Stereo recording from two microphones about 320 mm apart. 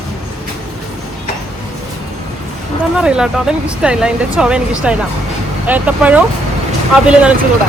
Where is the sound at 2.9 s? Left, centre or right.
Centre.